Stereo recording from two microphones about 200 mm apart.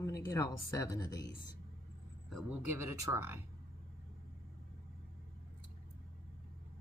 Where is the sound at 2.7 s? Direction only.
15° right (ahead or behind).